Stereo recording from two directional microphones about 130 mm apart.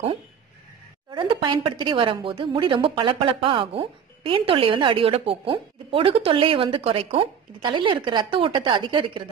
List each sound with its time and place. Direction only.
1.1 s a woman's voice: 40° right (ahead or behind)